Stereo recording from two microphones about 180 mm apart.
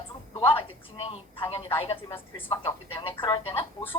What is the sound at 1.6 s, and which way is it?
A woman's voice, 30° left (ahead or behind).